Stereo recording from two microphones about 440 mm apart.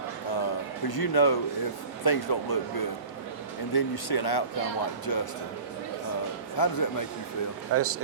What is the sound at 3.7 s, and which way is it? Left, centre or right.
Speech, left.